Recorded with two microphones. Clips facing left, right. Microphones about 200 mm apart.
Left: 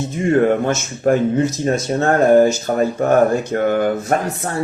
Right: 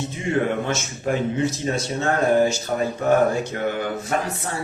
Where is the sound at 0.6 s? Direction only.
50° left (ahead or behind).